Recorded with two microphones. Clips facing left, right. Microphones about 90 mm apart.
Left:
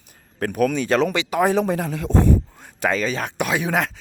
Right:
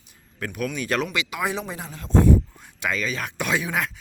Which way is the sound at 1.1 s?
40° left (ahead or behind).